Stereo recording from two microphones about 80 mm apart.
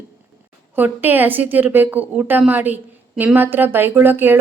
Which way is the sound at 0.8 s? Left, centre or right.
Right.